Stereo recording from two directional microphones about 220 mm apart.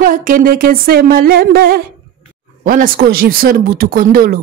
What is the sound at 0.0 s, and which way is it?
Speech, 40° right (ahead or behind).